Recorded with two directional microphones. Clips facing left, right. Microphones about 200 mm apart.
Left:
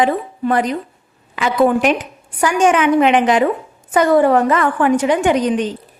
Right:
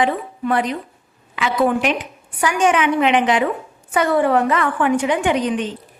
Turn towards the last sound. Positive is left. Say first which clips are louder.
# left 4 dB
turn(degrees=40)  # may be behind; listen again after turning